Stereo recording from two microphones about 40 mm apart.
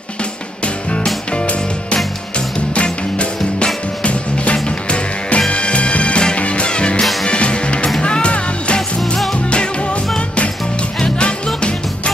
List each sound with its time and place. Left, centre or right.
1.3 s music: left